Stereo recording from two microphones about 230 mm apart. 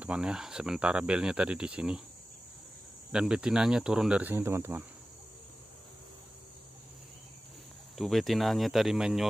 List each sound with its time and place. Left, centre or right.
0.0 s speech: centre
3.1 s speech: centre
8.0 s speech: centre